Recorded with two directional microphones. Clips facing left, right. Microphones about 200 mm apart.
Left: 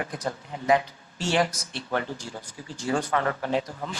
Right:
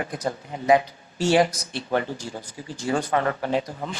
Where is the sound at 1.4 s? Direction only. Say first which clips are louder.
Right 4 dB; 35° right (ahead or behind).